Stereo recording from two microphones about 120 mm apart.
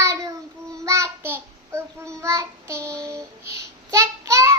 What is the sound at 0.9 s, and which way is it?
Child singing, 25° right (ahead or behind).